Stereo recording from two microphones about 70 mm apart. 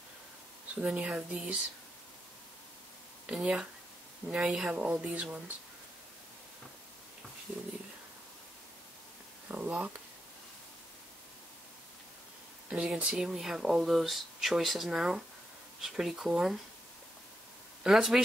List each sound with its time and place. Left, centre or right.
0.7 s speech: centre
3.3 s speech: centre
9.5 s speech: centre
12.6 s speech: centre
17.8 s speech: centre